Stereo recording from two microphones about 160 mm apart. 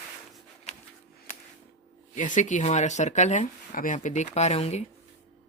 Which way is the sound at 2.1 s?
50° left (ahead or behind).